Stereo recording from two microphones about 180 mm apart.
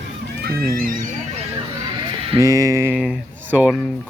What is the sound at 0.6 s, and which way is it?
Speech, 50° right (ahead or behind).